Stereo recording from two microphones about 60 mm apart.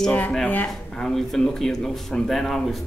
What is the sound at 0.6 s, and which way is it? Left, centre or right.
Speech, centre.